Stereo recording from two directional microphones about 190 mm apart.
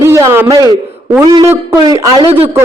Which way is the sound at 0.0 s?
15° right (ahead or behind).